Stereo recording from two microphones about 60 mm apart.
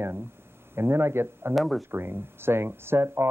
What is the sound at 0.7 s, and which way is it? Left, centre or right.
Speech, right.